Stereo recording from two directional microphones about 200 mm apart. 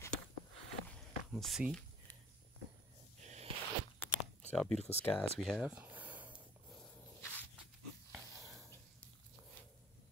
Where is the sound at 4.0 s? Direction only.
5° left (ahead or behind).